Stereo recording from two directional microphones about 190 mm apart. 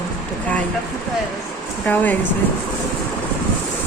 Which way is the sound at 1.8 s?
10° left (ahead or behind).